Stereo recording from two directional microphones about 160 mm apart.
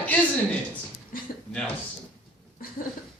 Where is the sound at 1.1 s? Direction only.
60° left (ahead or behind).